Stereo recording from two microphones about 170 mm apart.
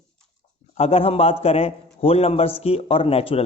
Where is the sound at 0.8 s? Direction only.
35° left (ahead or behind).